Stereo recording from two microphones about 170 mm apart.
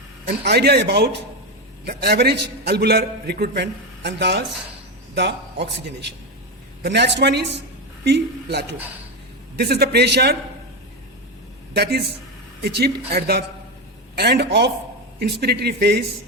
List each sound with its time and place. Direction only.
0.3 s a man's voice: 75° right (ahead or behind)
8.0 s a man's voice: 75° right (ahead or behind)
11.7 s a man's voice: 70° right (ahead or behind)
15.2 s a man's voice: 70° right (ahead or behind)